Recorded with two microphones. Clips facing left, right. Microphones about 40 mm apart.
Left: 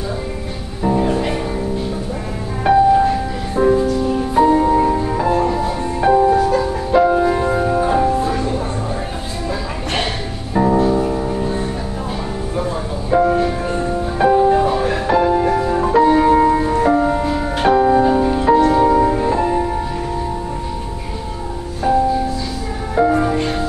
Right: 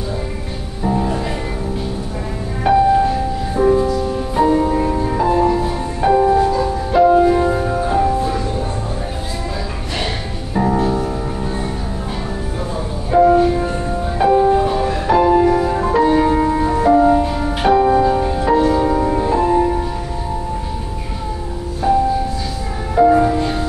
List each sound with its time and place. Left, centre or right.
0.8 s music: centre
2.6 s music: centre
10.5 s music: centre
13.1 s music: centre
22.9 s music: centre